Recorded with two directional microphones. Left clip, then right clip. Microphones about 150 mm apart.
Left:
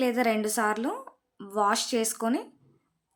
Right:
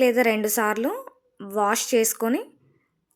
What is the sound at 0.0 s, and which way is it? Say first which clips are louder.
A woman's voice: right 6 dB; 20° right (ahead or behind).